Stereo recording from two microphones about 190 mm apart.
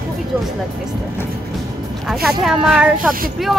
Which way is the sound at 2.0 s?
Centre (ahead or behind).